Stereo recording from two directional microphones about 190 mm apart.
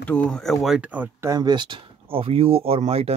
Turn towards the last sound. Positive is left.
turn(degrees=-30)  # may be behind; listen again after turning